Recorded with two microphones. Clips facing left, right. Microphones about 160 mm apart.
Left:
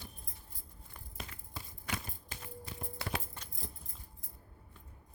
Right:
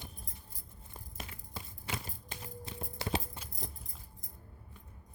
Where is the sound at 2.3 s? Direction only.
25° right (ahead or behind).